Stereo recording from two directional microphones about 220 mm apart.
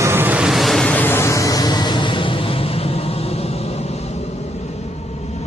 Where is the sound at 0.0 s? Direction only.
10° right (ahead or behind).